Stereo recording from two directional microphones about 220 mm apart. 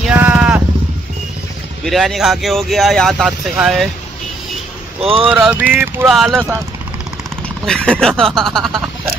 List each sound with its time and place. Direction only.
0.0 s vehicle: 5° right (ahead or behind)
1.9 s speech: centre (ahead or behind)
5.0 s speech: 25° right (ahead or behind)
5.3 s a sound: 5° right (ahead or behind)
6.1 s speech: centre (ahead or behind)
7.6 s speech: 5° left (ahead or behind)